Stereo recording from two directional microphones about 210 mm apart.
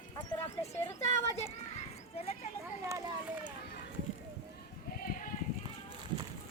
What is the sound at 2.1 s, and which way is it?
Speech, 30° left (ahead or behind).